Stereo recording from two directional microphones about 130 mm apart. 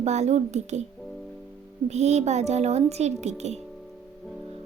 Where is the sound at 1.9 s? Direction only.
60° right (ahead or behind).